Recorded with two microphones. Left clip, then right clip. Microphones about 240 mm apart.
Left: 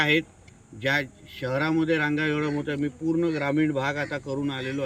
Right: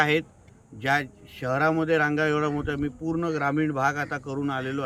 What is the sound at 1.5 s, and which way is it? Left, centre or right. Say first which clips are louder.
Speech: right 2 dB; right.